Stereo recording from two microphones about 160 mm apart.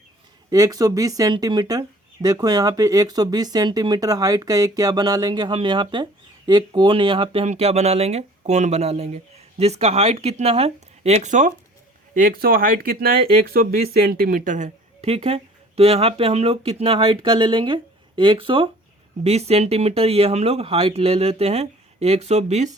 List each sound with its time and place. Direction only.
0.5 s speech: 20° right (ahead or behind); by 11.5 s 50° right (ahead or behind)
12.1 s speech: 65° right (ahead or behind); by 22.7 s 45° right (ahead or behind)